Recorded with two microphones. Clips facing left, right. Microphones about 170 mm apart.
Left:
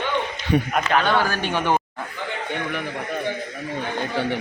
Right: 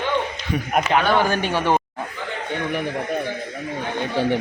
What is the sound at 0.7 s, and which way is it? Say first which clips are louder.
Speech: right 7 dB; 15° right (ahead or behind).